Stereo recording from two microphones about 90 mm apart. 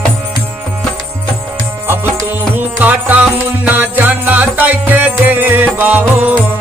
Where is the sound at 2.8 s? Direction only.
20° right (ahead or behind).